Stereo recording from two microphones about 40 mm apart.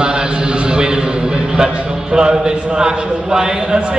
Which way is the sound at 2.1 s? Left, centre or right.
Centre.